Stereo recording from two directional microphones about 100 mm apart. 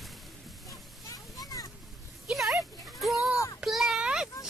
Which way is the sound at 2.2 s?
Centre (ahead or behind).